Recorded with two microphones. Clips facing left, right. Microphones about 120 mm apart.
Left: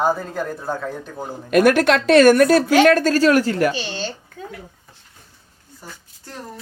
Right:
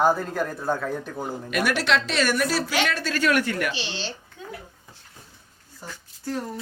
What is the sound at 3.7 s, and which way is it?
Speech, 45° left (ahead or behind).